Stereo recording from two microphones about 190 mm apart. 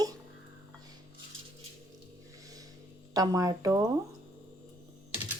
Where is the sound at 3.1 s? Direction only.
20° right (ahead or behind).